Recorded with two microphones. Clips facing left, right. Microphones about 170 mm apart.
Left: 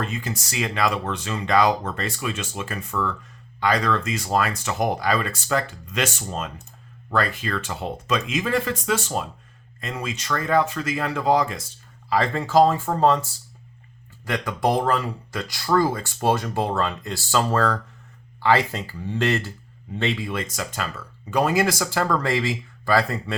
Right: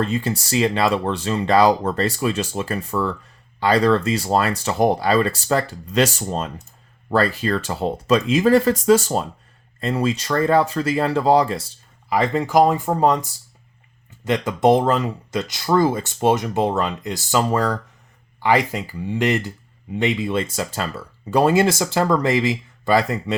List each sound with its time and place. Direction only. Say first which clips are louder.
0.0 s speech: right 7 dB; 30° right (ahead or behind)
12.0 s speech: right 3 dB; 15° right (ahead or behind)